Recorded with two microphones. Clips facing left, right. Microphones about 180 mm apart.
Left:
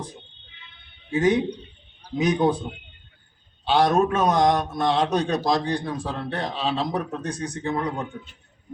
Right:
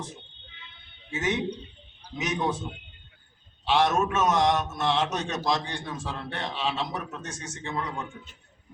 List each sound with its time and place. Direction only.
1.1 s a man's voice: 35° left (ahead or behind)
3.7 s a man's voice: 35° left (ahead or behind)